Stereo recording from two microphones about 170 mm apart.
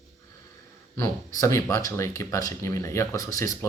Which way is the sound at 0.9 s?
20° left (ahead or behind).